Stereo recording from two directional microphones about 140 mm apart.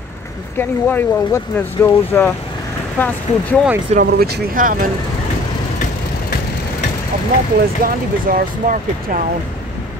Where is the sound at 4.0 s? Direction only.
75° right (ahead or behind).